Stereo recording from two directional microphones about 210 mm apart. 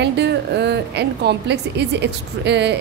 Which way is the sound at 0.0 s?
55° right (ahead or behind).